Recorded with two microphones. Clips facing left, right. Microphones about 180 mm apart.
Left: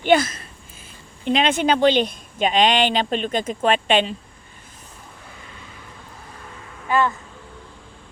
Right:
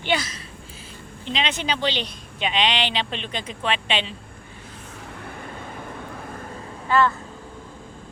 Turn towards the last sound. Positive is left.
turn(degrees=15)  # may be behind; listen again after turning